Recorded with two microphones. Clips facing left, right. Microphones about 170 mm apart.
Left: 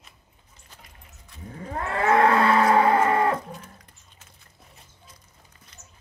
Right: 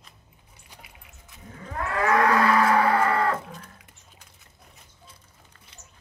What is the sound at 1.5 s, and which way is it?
Livestock, 30° left (ahead or behind).